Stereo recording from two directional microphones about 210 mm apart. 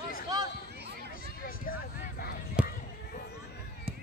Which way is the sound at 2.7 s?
45° left (ahead or behind).